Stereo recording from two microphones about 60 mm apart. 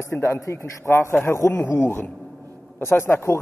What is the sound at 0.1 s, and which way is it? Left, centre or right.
A man's voice, left.